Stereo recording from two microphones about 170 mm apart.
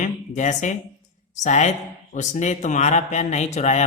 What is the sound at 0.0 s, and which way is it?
Speech, 45° left (ahead or behind).